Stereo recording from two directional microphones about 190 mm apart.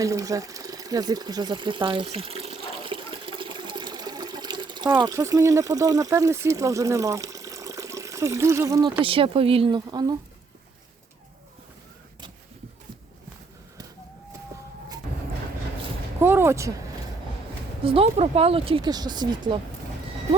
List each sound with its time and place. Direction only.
0.0 s speech: 15° right (ahead or behind)
16.2 s a sound: 10° right (ahead or behind)
17.8 s speech: 30° right (ahead or behind)